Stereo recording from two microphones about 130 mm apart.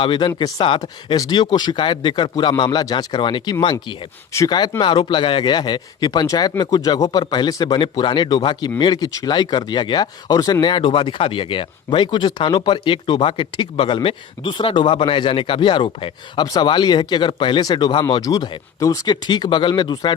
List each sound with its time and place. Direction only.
0.0 s speech: 40° left (ahead or behind)